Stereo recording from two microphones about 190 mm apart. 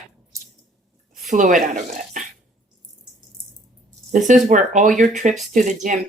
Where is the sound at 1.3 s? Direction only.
45° right (ahead or behind).